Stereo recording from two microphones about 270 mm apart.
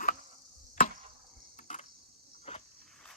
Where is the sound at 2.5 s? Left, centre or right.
Left.